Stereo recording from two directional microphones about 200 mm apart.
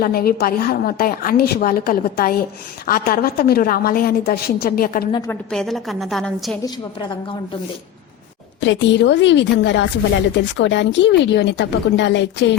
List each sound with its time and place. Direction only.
0.0 s a woman's voice: 50° left (ahead or behind)
5.3 s a woman's voice: 5° left (ahead or behind)
8.6 s speech: 65° left (ahead or behind)